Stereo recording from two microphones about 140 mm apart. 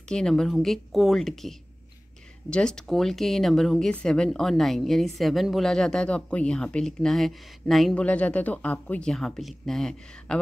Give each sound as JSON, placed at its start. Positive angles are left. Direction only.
{"t": 0.1, "sound": "a woman's voice", "side_deg": 5}
{"t": 2.5, "sound": "a woman's voice", "side_deg": 5}